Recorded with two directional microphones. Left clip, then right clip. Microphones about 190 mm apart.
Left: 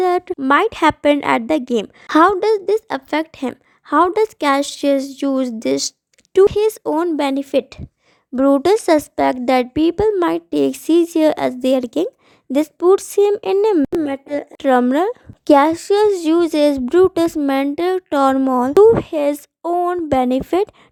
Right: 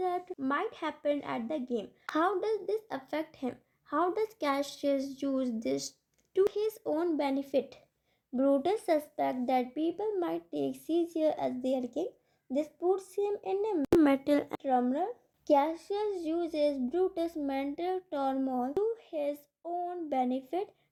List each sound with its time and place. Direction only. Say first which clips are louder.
0.0 s a woman's voice: left 16 dB; 40° left (ahead or behind)
14.0 s a woman's voice: left 5 dB; 25° left (ahead or behind)
14.6 s a woman's voice: left 15 dB; 50° left (ahead or behind)